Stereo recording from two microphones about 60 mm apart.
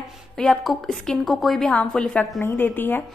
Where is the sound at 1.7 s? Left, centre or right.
Centre.